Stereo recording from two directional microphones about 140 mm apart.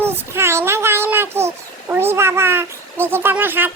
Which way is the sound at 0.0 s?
15° right (ahead or behind).